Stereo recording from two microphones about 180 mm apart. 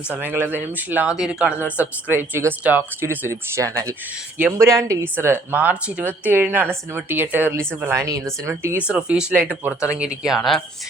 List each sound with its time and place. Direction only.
0.1 s speech: 10° right (ahead or behind)